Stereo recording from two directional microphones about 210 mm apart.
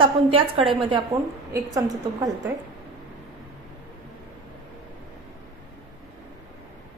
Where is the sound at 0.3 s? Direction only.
25° right (ahead or behind).